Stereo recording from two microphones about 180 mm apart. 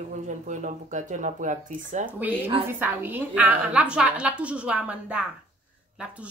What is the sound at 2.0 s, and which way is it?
A woman's voice, 10° right (ahead or behind).